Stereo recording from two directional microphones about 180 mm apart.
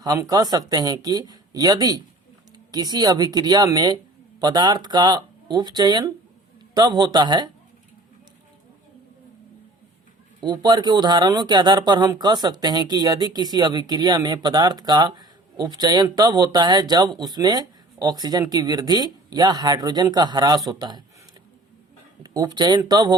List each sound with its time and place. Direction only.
0.0 s speech: 20° right (ahead or behind)
10.4 s speech: 25° right (ahead or behind)
22.2 s speech: 20° right (ahead or behind)